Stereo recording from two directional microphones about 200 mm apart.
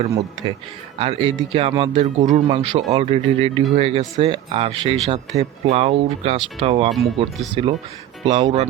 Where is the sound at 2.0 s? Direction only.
35° right (ahead or behind).